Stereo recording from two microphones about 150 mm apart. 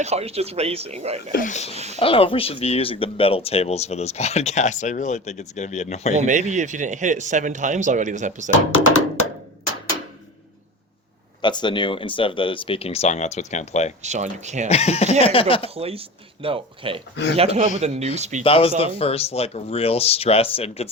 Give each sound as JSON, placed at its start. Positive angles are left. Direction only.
{"t": 0.0, "sound": "speech", "side_deg": -45}
{"t": 1.3, "sound": "speech", "side_deg": 65}
{"t": 1.5, "sound": "speech", "side_deg": 45}
{"t": 6.1, "sound": "a man's voice", "side_deg": -55}
{"t": 11.4, "sound": "speech", "side_deg": 30}
{"t": 14.0, "sound": "speech", "side_deg": -50}
{"t": 14.7, "sound": "speech", "side_deg": 45}
{"t": 15.7, "sound": "speech", "side_deg": -40}
{"t": 18.4, "sound": "speech", "side_deg": 40}